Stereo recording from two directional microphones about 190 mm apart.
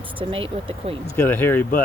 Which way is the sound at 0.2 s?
30° right (ahead or behind).